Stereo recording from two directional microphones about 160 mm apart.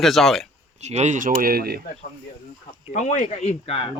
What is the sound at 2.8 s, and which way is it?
Speech, 50° left (ahead or behind).